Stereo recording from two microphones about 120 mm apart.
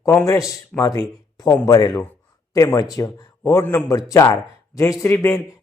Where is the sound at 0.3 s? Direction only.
30° left (ahead or behind).